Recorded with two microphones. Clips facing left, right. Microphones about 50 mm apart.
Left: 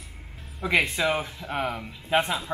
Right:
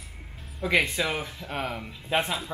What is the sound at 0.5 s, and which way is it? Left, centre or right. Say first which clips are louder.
Speech: left 1 dB; centre.